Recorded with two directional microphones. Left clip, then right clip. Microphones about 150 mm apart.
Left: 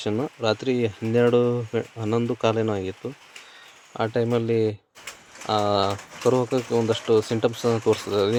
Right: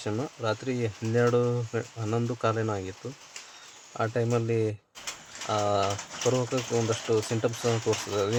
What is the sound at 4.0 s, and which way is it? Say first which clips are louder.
Speech: left 4 dB; 15° left (ahead or behind).